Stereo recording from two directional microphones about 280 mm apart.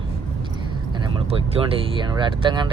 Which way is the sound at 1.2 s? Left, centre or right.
Centre.